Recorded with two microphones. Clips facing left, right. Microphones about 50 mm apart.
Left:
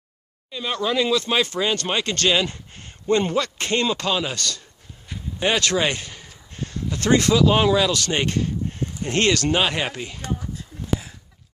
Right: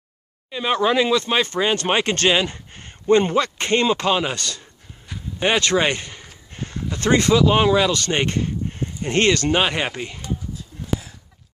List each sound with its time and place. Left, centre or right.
0.5 s speech: right
2.4 s speech: centre
3.9 s speech: right